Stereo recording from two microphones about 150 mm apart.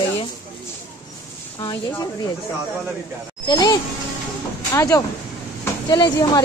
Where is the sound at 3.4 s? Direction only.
25° left (ahead or behind).